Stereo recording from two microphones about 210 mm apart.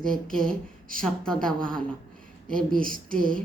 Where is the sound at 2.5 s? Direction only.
40° right (ahead or behind).